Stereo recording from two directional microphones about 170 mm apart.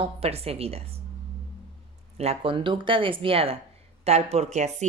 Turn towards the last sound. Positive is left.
turn(degrees=-40)  # may be behind; listen again after turning